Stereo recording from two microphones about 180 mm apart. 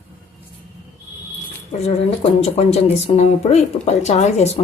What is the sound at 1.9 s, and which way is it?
Speech, 35° left (ahead or behind).